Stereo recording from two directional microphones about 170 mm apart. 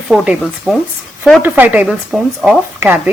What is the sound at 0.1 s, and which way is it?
Speech, centre (ahead or behind).